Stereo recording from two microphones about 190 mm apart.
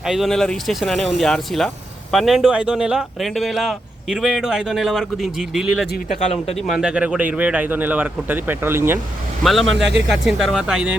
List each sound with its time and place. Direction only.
0.0 s speech: centre (ahead or behind)
9.4 s speech: centre (ahead or behind)
9.6 s speech: 70° right (ahead or behind)
10.1 s speech: centre (ahead or behind)